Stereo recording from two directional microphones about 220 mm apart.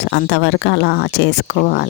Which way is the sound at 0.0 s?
50° left (ahead or behind).